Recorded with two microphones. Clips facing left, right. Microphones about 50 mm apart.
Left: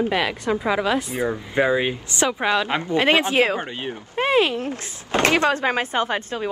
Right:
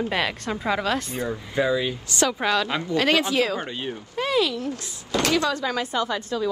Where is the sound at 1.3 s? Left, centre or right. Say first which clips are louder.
Left 2 dB; left.